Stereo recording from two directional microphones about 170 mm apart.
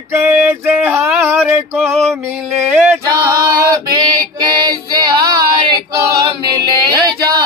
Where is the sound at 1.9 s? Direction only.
Centre (ahead or behind).